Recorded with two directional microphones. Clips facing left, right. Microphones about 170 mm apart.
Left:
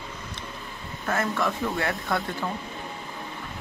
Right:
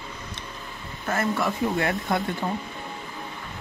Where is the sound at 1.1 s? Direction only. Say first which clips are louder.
Right 1 dB; 5° right (ahead or behind).